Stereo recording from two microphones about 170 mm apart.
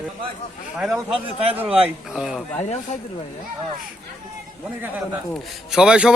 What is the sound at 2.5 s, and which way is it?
Speech, 40° left (ahead or behind).